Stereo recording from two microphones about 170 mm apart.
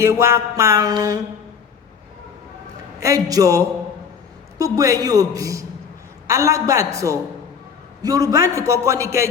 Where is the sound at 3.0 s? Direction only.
20° right (ahead or behind).